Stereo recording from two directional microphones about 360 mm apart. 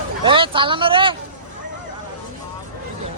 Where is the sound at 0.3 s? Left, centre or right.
Centre.